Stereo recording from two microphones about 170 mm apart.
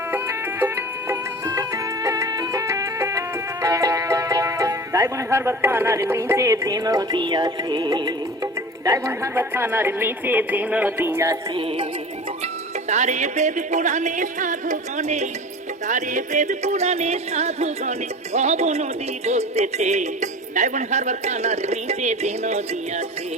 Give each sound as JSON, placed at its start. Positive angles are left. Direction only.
{"t": 0.1, "sound": "music", "side_deg": -15}
{"t": 8.8, "sound": "speech", "side_deg": -20}
{"t": 12.9, "sound": "music", "side_deg": -45}
{"t": 15.9, "sound": "speech", "side_deg": -45}